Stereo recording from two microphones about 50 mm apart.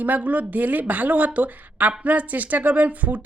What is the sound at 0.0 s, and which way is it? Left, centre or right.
Speech, right.